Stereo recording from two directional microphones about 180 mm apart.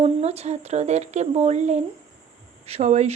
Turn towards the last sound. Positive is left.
turn(degrees=-40)  # may be behind; listen again after turning